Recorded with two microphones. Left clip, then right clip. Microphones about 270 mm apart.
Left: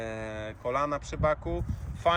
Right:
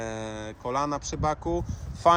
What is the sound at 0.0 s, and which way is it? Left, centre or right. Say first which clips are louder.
Speech: right 2 dB; centre.